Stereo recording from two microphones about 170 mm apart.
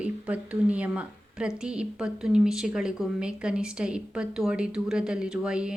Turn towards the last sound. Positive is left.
turn(degrees=-5)  # may be behind; listen again after turning